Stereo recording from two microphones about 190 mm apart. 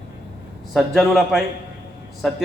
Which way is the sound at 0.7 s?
Centre (ahead or behind).